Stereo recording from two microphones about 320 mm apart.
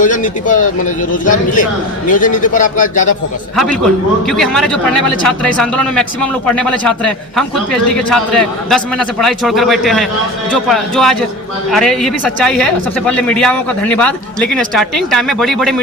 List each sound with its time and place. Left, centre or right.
0.0 s a man's voice: left
3.5 s a woman's voice: centre